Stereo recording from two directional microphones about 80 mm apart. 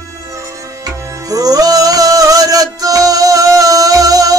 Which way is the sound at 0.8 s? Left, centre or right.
Right.